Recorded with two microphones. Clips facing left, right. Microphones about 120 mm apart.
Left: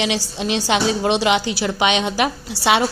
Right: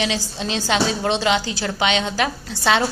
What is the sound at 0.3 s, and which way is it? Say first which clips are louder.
A woman's voice: left 1 dB; 20° left (ahead or behind).